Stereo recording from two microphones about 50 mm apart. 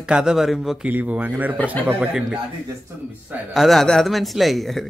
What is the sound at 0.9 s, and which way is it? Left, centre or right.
Speech, right.